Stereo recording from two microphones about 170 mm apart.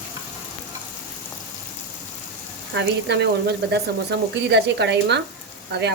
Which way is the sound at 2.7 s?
90° right.